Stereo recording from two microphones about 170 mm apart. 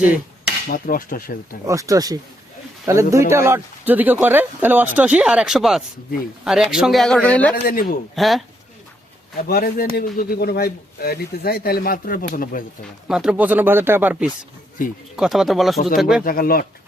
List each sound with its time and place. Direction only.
0.7 s speech: 55° left (ahead or behind)
1.6 s speech: 20° right (ahead or behind); by 7.5 s 10° left (ahead or behind)
7.5 s speech: 60° left (ahead or behind)
8.1 s speech: centre (ahead or behind)
9.5 s speech: 60° left (ahead or behind)
13.1 s speech: 5° right (ahead or behind)
14.8 s speech: 50° left (ahead or behind)
15.1 s speech: centre (ahead or behind)
16.2 s speech: 60° left (ahead or behind)